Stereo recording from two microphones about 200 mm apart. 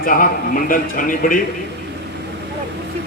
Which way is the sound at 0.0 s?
45° left (ahead or behind).